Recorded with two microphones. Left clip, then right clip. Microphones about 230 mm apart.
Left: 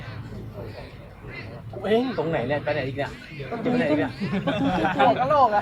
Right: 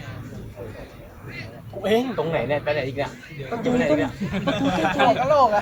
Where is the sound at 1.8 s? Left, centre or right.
Right.